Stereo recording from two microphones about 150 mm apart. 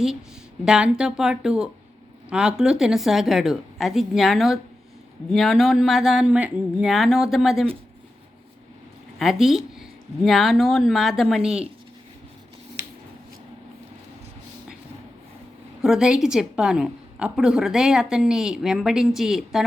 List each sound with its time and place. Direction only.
0.6 s a woman's voice: 5° right (ahead or behind)
9.1 s a woman's voice: centre (ahead or behind)
15.8 s a woman's voice: 5° right (ahead or behind)